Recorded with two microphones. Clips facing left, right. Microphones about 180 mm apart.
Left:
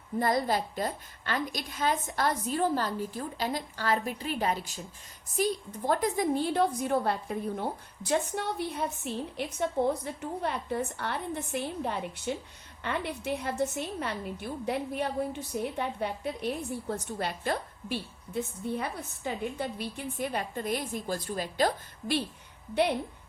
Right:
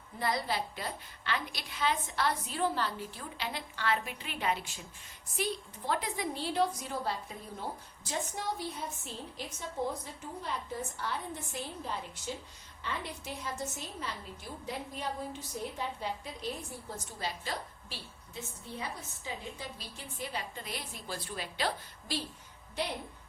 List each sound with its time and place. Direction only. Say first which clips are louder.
0.2 s a woman's voice: left 6 dB; 45° left (ahead or behind)